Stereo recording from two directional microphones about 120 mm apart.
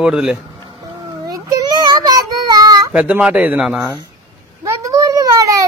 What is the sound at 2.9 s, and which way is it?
Speech, 10° right (ahead or behind).